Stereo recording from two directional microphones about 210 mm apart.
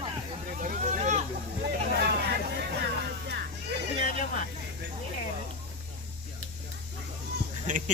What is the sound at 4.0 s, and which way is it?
Hubbub, 35° left (ahead or behind).